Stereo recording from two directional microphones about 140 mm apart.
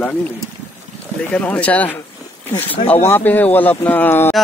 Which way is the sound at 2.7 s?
45° left (ahead or behind).